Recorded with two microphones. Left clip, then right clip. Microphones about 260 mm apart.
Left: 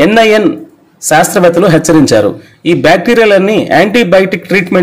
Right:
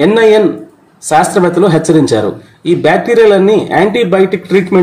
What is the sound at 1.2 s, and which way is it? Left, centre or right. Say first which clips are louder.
Speech: left 3 dB; left.